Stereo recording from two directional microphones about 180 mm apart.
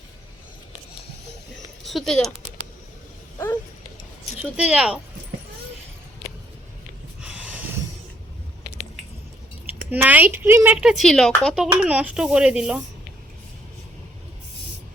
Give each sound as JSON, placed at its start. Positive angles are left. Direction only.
{"t": 1.8, "sound": "speech", "side_deg": 0}
{"t": 3.3, "sound": "a sound", "side_deg": 20}
{"t": 4.4, "sound": "speech", "side_deg": -5}
{"t": 7.2, "sound": "snort", "side_deg": -5}
{"t": 9.9, "sound": "speech", "side_deg": -10}